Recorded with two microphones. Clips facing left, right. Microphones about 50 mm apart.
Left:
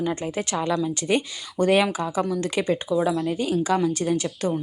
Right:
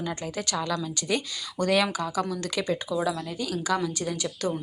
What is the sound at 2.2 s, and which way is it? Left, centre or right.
Speech, centre.